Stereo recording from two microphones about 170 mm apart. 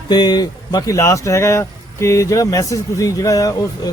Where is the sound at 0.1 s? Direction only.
25° left (ahead or behind).